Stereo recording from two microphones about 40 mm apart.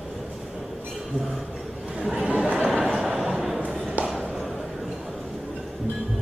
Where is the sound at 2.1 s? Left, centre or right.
Right.